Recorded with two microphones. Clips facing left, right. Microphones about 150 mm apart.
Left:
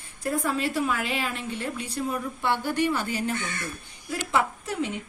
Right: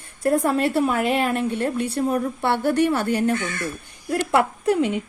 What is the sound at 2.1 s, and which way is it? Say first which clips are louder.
Speech: right 6 dB; 60° right (ahead or behind).